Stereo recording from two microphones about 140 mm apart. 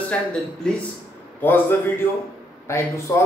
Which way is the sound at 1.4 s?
15° left (ahead or behind).